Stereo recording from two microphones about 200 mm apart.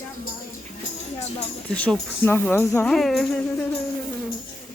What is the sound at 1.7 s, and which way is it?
Speech, 5° left (ahead or behind).